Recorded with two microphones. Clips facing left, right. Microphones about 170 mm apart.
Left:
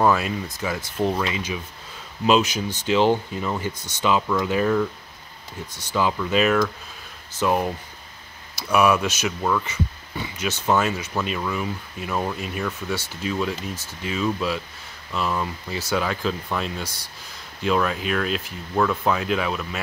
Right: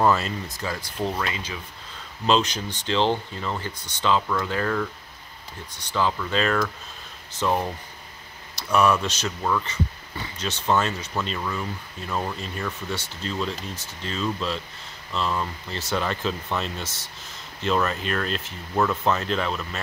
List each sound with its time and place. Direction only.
0.2 s speech: 15° left (ahead or behind)
5.7 s speech: 15° right (ahead or behind)
5.9 s speech: 10° left (ahead or behind)
16.8 s speech: 25° right (ahead or behind)
17.6 s speech: 5° left (ahead or behind)